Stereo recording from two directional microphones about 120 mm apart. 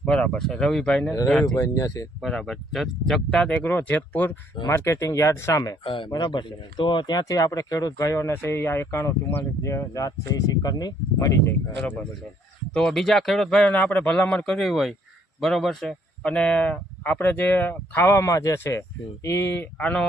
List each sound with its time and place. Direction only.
0.0 s speech: 10° left (ahead or behind)
1.5 s speech: 25° left (ahead or behind)
2.2 s speech: centre (ahead or behind); by 5.7 s 25° left (ahead or behind)
5.8 s speech: 45° left (ahead or behind); by 11.5 s 25° left (ahead or behind)
12.7 s speech: 5° left (ahead or behind); by 19.6 s 20° left (ahead or behind)
19.8 s speech: 10° left (ahead or behind)